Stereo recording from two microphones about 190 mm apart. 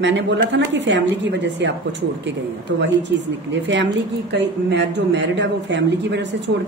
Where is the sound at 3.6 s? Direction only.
70° right (ahead or behind).